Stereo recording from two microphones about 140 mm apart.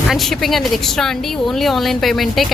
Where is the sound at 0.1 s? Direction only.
Centre (ahead or behind).